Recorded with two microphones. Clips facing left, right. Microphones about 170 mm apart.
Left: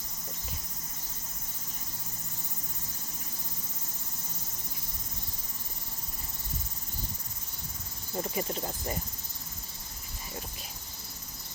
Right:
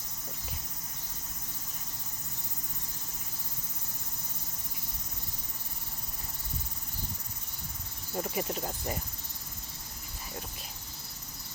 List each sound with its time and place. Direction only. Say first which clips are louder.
8.1 s cricket: even; 10° right (ahead or behind)